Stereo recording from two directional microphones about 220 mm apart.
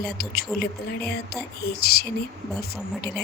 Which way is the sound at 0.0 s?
45° left (ahead or behind).